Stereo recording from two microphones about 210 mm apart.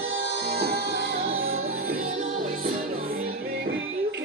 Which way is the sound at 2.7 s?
75° right (ahead or behind).